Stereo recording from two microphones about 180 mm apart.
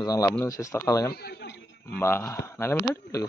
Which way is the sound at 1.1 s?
60° left (ahead or behind).